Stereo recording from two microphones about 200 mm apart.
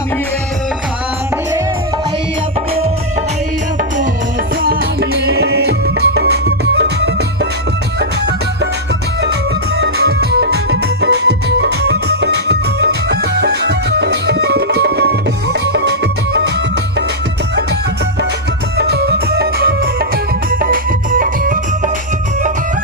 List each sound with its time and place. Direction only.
4.6 s music: 50° right (ahead or behind)
9.7 s music: 55° right (ahead or behind)
18.8 s music: 55° right (ahead or behind)